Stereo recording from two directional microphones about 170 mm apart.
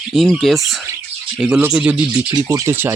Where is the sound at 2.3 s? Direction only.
20° right (ahead or behind).